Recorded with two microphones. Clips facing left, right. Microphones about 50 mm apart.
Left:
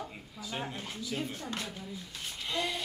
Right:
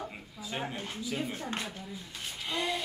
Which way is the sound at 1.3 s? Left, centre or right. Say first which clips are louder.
Right 2 dB; right.